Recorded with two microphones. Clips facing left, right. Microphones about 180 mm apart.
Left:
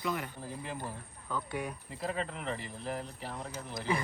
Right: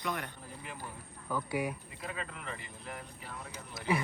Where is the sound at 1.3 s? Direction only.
10° right (ahead or behind).